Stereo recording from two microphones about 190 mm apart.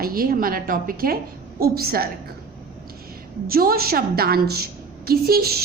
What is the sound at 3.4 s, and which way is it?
A woman's voice, 50° right (ahead or behind).